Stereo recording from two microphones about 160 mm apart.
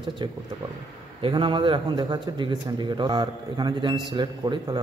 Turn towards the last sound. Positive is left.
turn(degrees=-30)  # may be behind; listen again after turning